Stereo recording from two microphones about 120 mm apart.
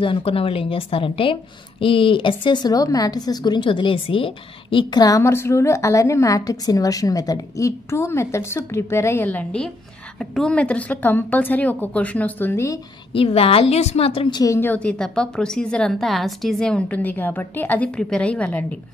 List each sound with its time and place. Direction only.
0.0 s a woman's voice: 50° left (ahead or behind)
5.0 s a woman's voice: 25° left (ahead or behind)
13.1 s a woman's voice: 50° left (ahead or behind)
14.3 s a woman's voice: 30° left (ahead or behind)
14.6 s a woman's voice: 10° left (ahead or behind)